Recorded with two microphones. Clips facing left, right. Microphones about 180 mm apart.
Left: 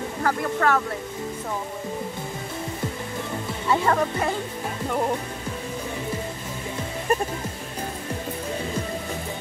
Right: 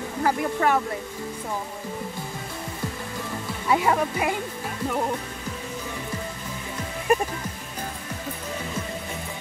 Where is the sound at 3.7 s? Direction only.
10° right (ahead or behind).